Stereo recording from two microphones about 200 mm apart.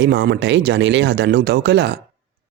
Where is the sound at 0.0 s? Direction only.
60° right (ahead or behind).